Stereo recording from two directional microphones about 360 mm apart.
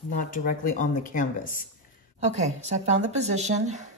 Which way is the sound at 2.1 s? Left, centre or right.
Centre.